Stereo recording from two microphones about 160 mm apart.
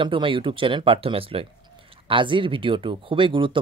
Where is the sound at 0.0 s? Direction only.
30° right (ahead or behind).